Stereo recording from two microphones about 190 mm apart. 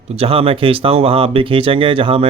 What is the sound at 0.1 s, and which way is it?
Speech, 30° right (ahead or behind).